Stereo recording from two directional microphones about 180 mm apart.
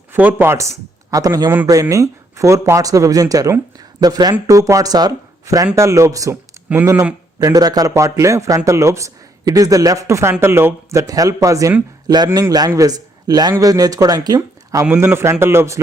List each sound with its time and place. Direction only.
0.1 s speech: 10° right (ahead or behind)